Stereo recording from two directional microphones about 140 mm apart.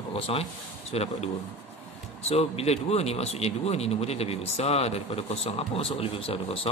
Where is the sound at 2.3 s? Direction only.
45° left (ahead or behind).